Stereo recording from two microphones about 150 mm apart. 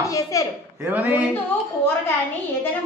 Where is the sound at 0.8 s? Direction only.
10° right (ahead or behind).